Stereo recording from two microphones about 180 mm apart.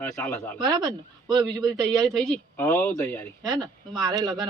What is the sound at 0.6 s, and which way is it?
Speech, 20° right (ahead or behind).